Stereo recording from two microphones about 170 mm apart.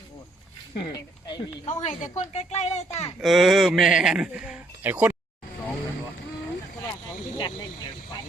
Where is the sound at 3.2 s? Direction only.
Centre (ahead or behind).